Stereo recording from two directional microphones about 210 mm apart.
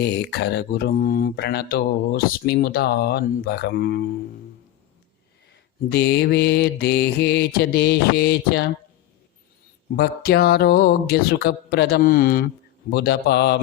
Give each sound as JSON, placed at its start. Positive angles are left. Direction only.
{"t": 0.0, "sound": "speech", "side_deg": 50}
{"t": 5.9, "sound": "speech", "side_deg": 55}
{"t": 9.9, "sound": "speech", "side_deg": 50}